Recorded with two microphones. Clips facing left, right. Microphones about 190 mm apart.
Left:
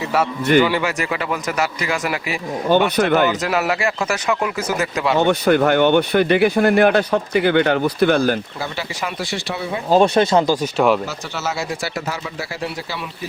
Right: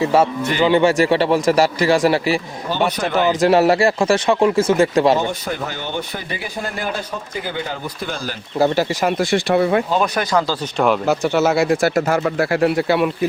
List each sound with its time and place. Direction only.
0.0 s speech: 25° right (ahead or behind)
2.6 s speech: 55° left (ahead or behind)
3.4 s speech: 30° right (ahead or behind)
5.2 s speech: 70° left (ahead or behind)
8.5 s speech: 45° right (ahead or behind); by 9.8 s 60° right (ahead or behind)
9.9 s speech: 25° left (ahead or behind)
10.8 s speech: centre (ahead or behind)
11.0 s speech: 55° right (ahead or behind)